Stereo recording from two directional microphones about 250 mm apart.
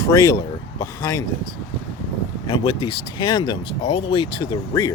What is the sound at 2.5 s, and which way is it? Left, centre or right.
Speech, centre.